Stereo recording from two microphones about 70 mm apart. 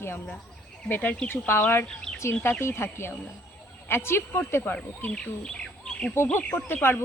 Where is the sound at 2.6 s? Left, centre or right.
Left.